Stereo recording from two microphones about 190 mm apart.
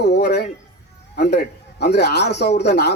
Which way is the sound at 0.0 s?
60° left (ahead or behind).